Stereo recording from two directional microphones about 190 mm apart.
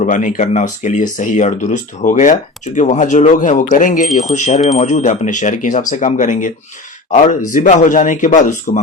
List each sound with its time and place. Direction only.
0.0 s speech: 40° left (ahead or behind)